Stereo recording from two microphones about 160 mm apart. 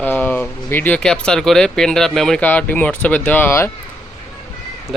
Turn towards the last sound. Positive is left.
turn(degrees=10)  # may be behind; listen again after turning